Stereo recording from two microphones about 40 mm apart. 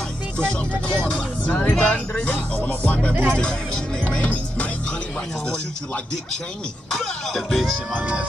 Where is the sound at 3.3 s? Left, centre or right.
Left.